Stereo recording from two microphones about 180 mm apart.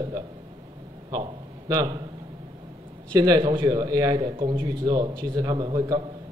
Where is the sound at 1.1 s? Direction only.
25° right (ahead or behind).